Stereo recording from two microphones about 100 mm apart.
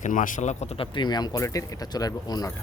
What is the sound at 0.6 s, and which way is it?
Speech, 90° left.